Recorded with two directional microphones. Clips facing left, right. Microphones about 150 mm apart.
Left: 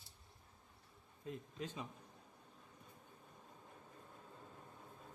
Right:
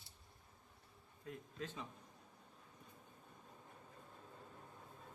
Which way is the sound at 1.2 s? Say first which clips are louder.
Left 2 dB; 20° left (ahead or behind).